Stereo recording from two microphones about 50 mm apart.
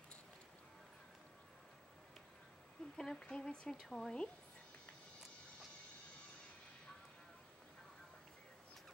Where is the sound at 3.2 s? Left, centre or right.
Centre.